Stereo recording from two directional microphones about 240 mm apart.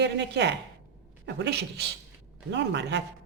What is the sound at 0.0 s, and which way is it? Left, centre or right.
Speech, right.